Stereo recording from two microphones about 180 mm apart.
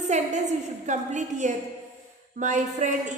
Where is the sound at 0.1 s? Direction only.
40° right (ahead or behind).